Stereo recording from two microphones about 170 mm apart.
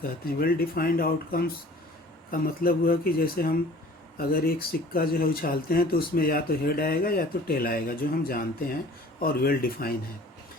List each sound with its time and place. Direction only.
0.0 s speech: 60° left (ahead or behind)